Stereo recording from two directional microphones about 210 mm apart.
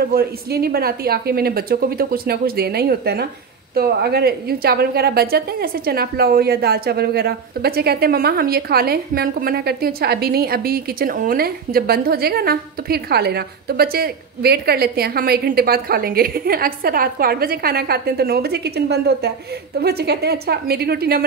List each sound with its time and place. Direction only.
0.0 s a woman's voice: 45° right (ahead or behind)